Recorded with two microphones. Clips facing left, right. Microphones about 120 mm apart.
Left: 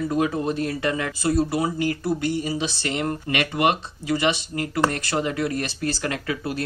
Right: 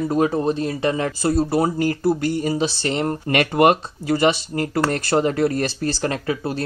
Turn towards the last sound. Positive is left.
turn(degrees=-30)  # may be behind; listen again after turning